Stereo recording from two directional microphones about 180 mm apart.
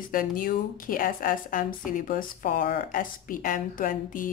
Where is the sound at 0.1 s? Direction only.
50° left (ahead or behind).